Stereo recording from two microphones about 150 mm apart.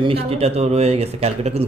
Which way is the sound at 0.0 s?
40° right (ahead or behind).